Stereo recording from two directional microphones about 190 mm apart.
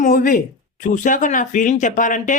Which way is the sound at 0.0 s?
45° left (ahead or behind).